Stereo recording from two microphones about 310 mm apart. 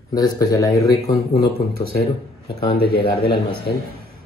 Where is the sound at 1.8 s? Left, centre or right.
Left.